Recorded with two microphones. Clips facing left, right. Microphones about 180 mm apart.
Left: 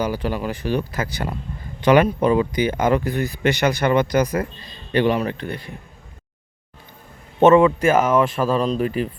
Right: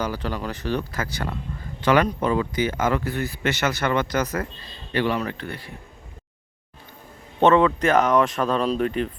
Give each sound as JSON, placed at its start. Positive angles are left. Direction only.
{"t": 0.0, "sound": "speech", "side_deg": 10}
{"t": 7.3, "sound": "speech", "side_deg": 15}